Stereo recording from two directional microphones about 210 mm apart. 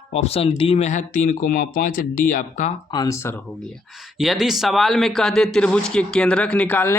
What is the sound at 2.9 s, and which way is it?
Speech, 20° left (ahead or behind).